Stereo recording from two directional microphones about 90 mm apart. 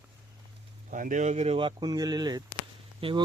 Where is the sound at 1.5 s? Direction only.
65° right (ahead or behind).